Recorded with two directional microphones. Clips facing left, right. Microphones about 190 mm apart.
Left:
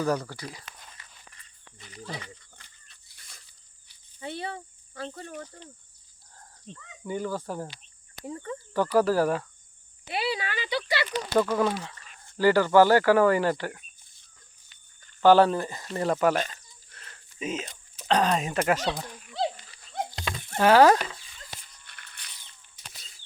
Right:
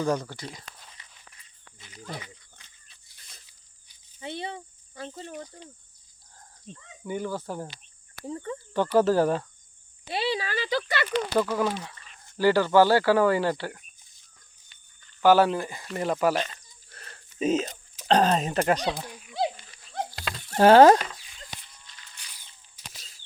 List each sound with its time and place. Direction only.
0.0 s speech: 15° right (ahead or behind)
1.8 s speech: 5° right (ahead or behind)
2.6 s a sound: 15° right (ahead or behind)
4.2 s speech: 20° right (ahead or behind)
7.1 s speech: 15° right (ahead or behind)
8.3 s speech: 25° right (ahead or behind); by 11.0 s 45° right (ahead or behind)
11.3 s speech: 5° right (ahead or behind)
15.2 s speech: 10° right (ahead or behind)
16.5 s a sound: 40° right (ahead or behind)
18.7 s speech: 20° right (ahead or behind)
19.0 s dog: 10° right (ahead or behind)
20.6 s speech: 30° right (ahead or behind)
21.8 s a sound: 60° left (ahead or behind)
22.3 s a sound: 5° right (ahead or behind)